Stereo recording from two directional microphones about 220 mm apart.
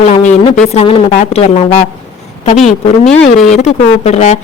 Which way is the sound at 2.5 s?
30° left (ahead or behind).